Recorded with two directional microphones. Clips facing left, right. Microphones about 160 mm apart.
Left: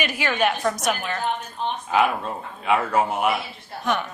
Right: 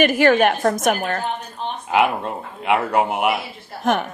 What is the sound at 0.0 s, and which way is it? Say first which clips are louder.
A woman's voice: right 8 dB; 50° right (ahead or behind).